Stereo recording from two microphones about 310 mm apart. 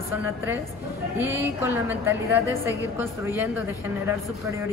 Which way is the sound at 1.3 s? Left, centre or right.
Centre.